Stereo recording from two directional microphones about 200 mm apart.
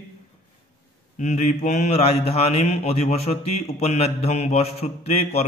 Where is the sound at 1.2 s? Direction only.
35° left (ahead or behind).